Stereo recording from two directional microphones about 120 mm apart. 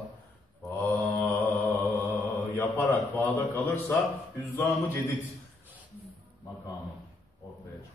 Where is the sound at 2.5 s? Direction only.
20° left (ahead or behind).